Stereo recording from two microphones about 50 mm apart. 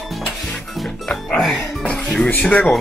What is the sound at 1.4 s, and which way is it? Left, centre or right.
Music, left.